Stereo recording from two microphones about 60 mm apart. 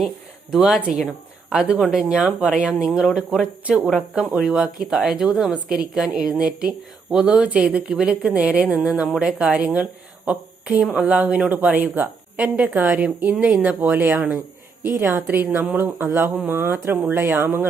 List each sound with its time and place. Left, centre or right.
0.5 s speech: centre
1.9 s a woman's voice: centre
2.8 s speech: centre
3.4 s a woman's voice: right
14.8 s speech: right